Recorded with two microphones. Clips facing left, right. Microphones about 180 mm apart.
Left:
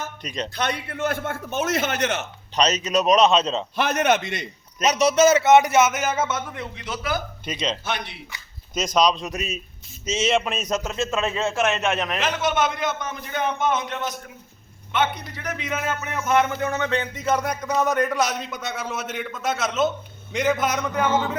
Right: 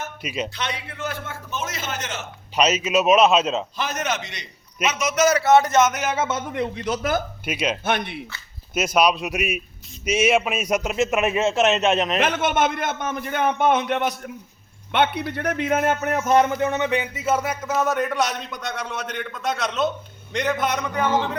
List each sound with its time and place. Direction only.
0.2 s a man's voice: 5° right (ahead or behind)
0.5 s a man's voice: 50° left (ahead or behind)
2.6 s speech: 5° right (ahead or behind)
3.8 s a man's voice: 60° left (ahead or behind); by 6.1 s 5° left (ahead or behind)
6.1 s a man's voice: 10° right (ahead or behind)
6.6 s speech: 45° right (ahead or behind)
7.4 s a man's voice: 10° right (ahead or behind)
7.9 s speech: 55° right (ahead or behind)
8.7 s a man's voice: 10° right (ahead or behind)
12.2 s a man's voice: 55° right (ahead or behind)
16.2 s speech: 35° right (ahead or behind)
16.6 s speech: 20° right (ahead or behind); by 21.1 s centre (ahead or behind)